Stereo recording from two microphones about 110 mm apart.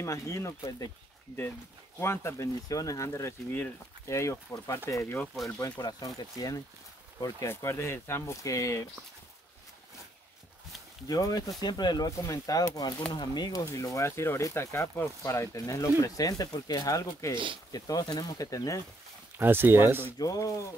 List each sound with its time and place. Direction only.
0.0 s speech: 25° left (ahead or behind)
2.0 s speech: 25° left (ahead or behind)
5.2 s speech: centre (ahead or behind)
5.6 s speech: 40° left (ahead or behind)
11.1 s speech: 35° left (ahead or behind)
19.3 s speech: 20° right (ahead or behind)
20.2 s speech: 30° left (ahead or behind)